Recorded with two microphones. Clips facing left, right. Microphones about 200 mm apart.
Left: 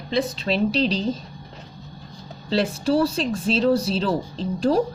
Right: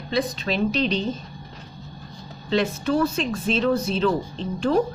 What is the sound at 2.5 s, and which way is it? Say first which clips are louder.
Speech: left 1 dB; 35° left (ahead or behind).